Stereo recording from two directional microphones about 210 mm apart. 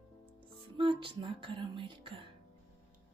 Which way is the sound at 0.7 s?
25° right (ahead or behind).